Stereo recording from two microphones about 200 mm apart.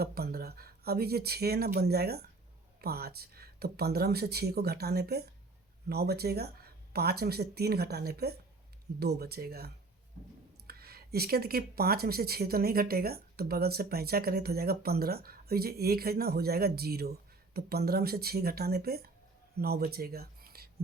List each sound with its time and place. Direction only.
0.0 s speech: 50° right (ahead or behind)